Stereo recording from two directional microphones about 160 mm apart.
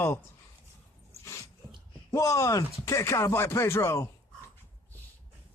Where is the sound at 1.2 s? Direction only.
20° left (ahead or behind).